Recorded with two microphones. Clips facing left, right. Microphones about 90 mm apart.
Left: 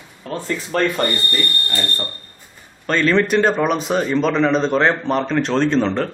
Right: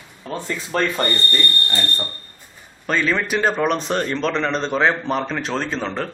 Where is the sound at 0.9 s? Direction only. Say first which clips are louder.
Left 1 dB; 5° left (ahead or behind).